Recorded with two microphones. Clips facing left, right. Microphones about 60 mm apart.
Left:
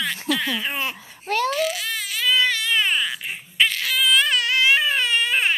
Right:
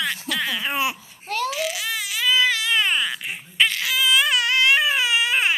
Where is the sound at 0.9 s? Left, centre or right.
Left.